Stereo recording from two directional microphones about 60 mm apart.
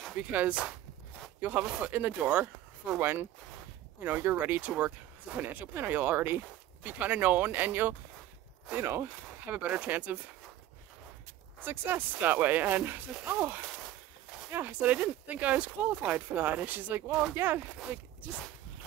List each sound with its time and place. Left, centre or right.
0.1 s speech: right
3.0 s speech: right
4.0 s speech: right
9.5 s speech: right
11.6 s speech: right